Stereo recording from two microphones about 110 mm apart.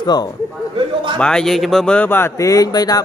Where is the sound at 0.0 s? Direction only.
40° left (ahead or behind).